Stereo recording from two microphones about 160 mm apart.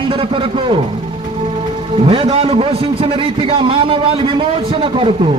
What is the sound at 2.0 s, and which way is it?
A man's voice, 35° right (ahead or behind).